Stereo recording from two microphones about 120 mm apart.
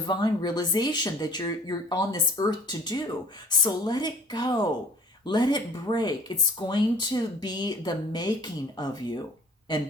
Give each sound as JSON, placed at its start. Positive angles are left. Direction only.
{"t": 0.0, "sound": "speech", "side_deg": 35}